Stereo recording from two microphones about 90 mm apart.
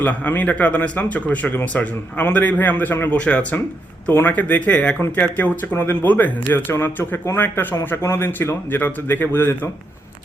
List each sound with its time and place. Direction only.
0.0 s speech: 20° left (ahead or behind)